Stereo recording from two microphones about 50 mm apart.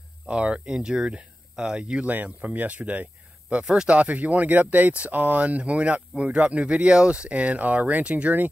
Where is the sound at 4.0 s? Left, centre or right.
Right.